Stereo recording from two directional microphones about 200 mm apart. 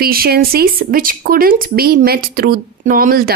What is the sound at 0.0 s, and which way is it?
A woman's voice, 50° right (ahead or behind).